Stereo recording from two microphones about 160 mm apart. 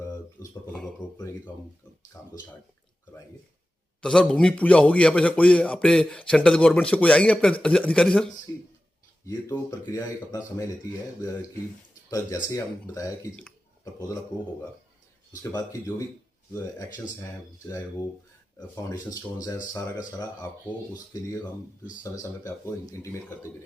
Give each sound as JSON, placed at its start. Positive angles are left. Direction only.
{"t": 0.7, "sound": "a sound", "side_deg": 0}
{"t": 4.0, "sound": "a man's voice", "side_deg": 5}
{"t": 8.5, "sound": "a sound", "side_deg": 15}
{"t": 9.2, "sound": "speech", "side_deg": 20}
{"t": 12.1, "sound": "speech", "side_deg": 20}
{"t": 15.5, "sound": "speech", "side_deg": 20}
{"t": 19.7, "sound": "speech", "side_deg": 25}
{"t": 22.2, "sound": "a man's voice", "side_deg": 20}